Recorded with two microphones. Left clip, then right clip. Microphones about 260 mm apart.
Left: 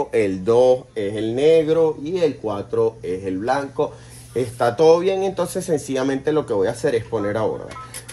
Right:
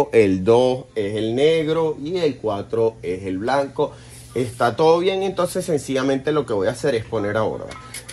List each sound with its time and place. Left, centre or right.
0.1 s speech: right